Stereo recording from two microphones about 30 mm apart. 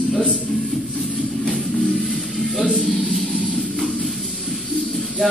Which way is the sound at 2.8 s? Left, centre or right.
Centre.